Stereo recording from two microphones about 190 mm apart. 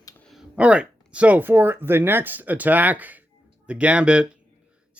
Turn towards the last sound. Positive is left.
turn(degrees=-5)  # may be behind; listen again after turning